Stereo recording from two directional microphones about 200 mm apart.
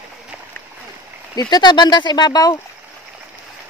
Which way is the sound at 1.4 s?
20° left (ahead or behind).